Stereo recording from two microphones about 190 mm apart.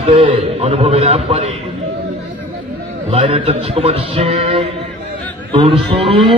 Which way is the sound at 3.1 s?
30° right (ahead or behind).